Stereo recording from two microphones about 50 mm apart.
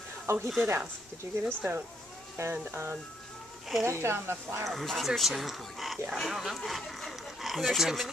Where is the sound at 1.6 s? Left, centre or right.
Right.